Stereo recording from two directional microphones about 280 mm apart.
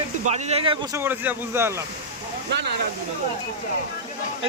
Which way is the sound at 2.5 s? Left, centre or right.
Right.